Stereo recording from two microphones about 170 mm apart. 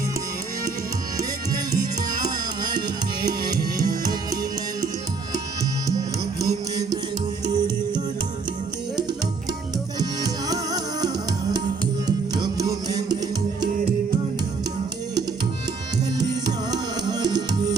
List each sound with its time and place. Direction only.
3.8 s music: 20° right (ahead or behind)
7.4 s music: 25° right (ahead or behind)
10.0 s music: 20° right (ahead or behind)
16.1 s music: 25° right (ahead or behind)